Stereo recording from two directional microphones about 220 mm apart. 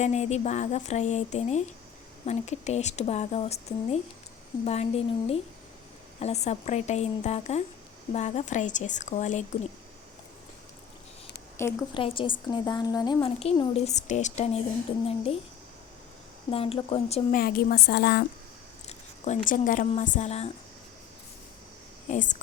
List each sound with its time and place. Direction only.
0.0 s a woman's voice: 30° left (ahead or behind)
6.1 s speech: 30° left (ahead or behind)
11.6 s a woman's voice: 10° left (ahead or behind)
11.9 s a woman's voice: 25° left (ahead or behind)
16.5 s a woman's voice: 25° left (ahead or behind)
17.3 s a woman's voice: 45° left (ahead or behind)
18.9 s speech: 30° left (ahead or behind)
22.1 s speech: 35° left (ahead or behind)